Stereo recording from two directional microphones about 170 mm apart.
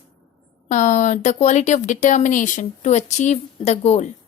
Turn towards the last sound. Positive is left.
turn(degrees=40)  # may be behind; listen again after turning